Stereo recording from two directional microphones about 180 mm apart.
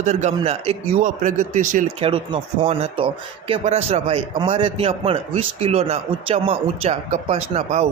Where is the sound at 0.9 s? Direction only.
45° right (ahead or behind).